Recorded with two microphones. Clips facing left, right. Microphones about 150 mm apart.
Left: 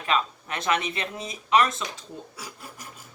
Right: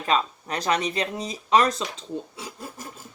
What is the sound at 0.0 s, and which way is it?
Speech, 35° right (ahead or behind).